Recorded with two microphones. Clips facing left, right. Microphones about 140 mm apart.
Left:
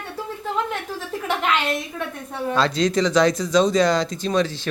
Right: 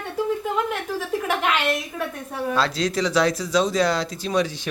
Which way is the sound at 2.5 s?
5° right (ahead or behind).